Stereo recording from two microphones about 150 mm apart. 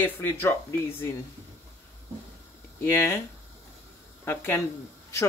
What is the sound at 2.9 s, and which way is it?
Speech, 15° left (ahead or behind).